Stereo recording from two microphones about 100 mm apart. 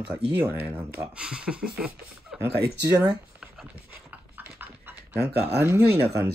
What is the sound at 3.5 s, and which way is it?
Dog, 15° right (ahead or behind).